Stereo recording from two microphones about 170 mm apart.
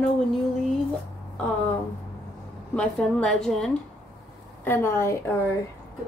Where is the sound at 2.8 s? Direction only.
5° left (ahead or behind).